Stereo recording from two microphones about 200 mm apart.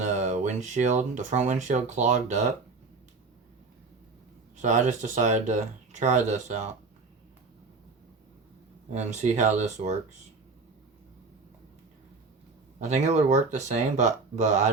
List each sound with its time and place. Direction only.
0.0 s speech: 40° right (ahead or behind)
4.5 s speech: 40° right (ahead or behind)
8.9 s speech: 35° right (ahead or behind)
12.8 s speech: 35° right (ahead or behind)